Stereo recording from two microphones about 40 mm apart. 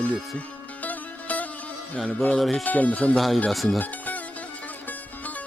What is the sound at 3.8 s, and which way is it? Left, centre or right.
Music, left.